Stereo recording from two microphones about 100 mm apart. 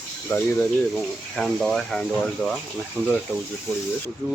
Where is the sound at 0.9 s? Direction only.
Centre (ahead or behind); by 3.1 s 15° left (ahead or behind).